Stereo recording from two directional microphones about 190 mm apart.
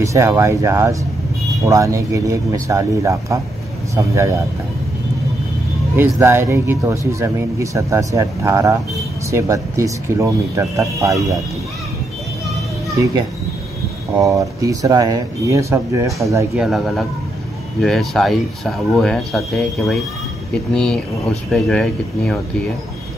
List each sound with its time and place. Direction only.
0.0 s speech: 15° right (ahead or behind)
5.9 s speech: 10° right (ahead or behind)
14.1 s speech: 15° right (ahead or behind)
16.5 s speech: centre (ahead or behind)